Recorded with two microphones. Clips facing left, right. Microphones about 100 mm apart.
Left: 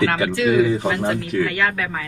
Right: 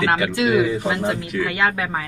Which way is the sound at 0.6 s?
20° right (ahead or behind).